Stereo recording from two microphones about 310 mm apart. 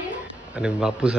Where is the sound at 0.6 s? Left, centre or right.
Centre.